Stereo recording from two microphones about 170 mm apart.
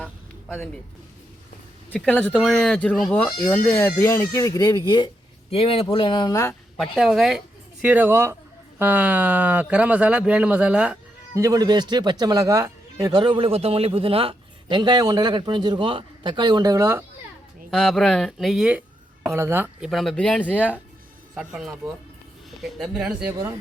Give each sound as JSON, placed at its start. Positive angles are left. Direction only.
{"t": 0.0, "sound": "a sound", "side_deg": 5}
{"t": 2.1, "sound": "speech", "side_deg": 10}
{"t": 6.7, "sound": "speech", "side_deg": 0}
{"t": 11.3, "sound": "a man's voice", "side_deg": -20}
{"t": 17.7, "sound": "speech", "side_deg": 0}
{"t": 19.3, "sound": "speech", "side_deg": -15}
{"t": 19.9, "sound": "speech", "side_deg": 0}
{"t": 20.6, "sound": "speech", "side_deg": -10}